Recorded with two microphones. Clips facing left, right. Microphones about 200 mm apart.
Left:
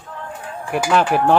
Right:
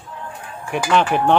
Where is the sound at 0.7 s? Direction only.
5° left (ahead or behind).